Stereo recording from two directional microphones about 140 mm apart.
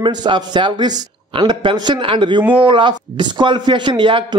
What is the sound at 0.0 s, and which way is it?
A man's voice, 35° right (ahead or behind).